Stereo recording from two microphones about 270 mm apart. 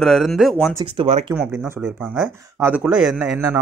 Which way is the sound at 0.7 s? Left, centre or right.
Centre.